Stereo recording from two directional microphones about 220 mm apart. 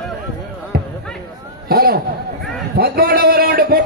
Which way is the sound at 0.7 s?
45° right (ahead or behind).